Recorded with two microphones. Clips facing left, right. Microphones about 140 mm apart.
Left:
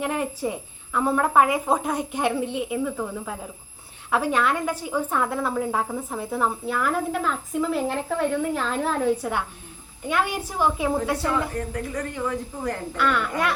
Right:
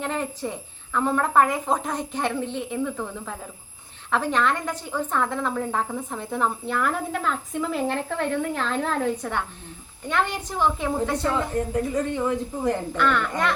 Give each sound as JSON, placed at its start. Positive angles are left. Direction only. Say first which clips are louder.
{"t": 0.0, "sound": "a woman's voice", "louder": "left 2 dB", "side_deg": 10}
{"t": 11.7, "sound": "a woman's voice", "louder": "right 5 dB", "side_deg": -25}
{"t": 13.0, "sound": "a woman's voice", "louder": "left 3 dB", "side_deg": 5}